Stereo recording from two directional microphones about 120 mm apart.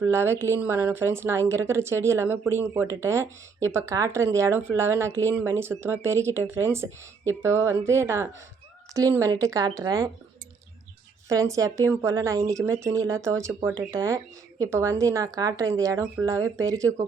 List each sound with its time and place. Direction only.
0.0 s speech: 20° right (ahead or behind)
11.3 s speech: 30° right (ahead or behind)